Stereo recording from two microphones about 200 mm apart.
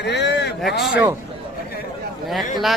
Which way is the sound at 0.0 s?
60° left (ahead or behind).